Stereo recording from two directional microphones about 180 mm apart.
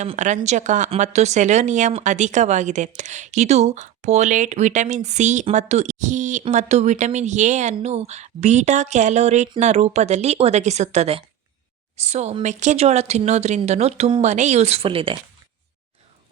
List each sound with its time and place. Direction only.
0.0 s speech: 40° right (ahead or behind)